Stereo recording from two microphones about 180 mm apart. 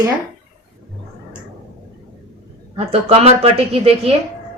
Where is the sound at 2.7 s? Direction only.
35° right (ahead or behind).